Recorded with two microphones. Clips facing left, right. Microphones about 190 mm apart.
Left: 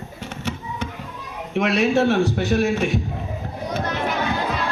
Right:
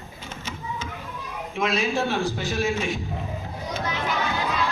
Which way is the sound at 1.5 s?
70° left (ahead or behind).